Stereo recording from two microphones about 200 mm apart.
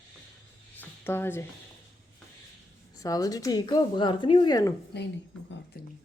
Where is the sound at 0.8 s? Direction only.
10° left (ahead or behind).